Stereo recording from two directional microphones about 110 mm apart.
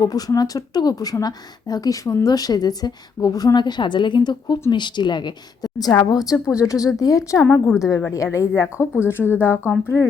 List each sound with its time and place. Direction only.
0.0 s a woman's voice: 35° left (ahead or behind)